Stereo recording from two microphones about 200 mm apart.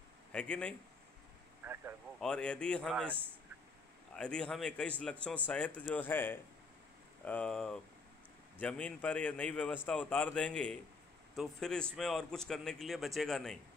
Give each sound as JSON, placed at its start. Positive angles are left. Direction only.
{"t": 0.3, "sound": "a man's voice", "side_deg": 5}
{"t": 1.6, "sound": "speech", "side_deg": -10}
{"t": 2.1, "sound": "a man's voice", "side_deg": 5}